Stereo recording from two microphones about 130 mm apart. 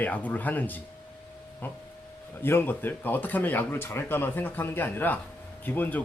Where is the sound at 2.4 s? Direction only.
15° left (ahead or behind).